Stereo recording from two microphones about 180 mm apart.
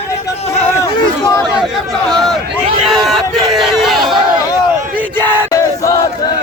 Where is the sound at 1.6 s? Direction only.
Centre (ahead or behind).